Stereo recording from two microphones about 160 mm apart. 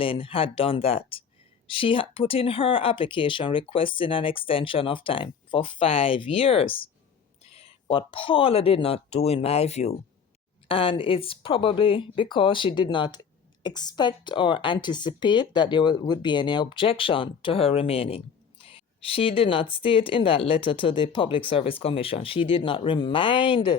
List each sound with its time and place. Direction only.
0.0 s speech: 35° left (ahead or behind)